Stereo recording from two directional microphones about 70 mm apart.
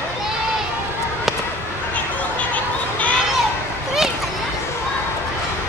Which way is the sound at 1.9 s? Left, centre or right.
Left.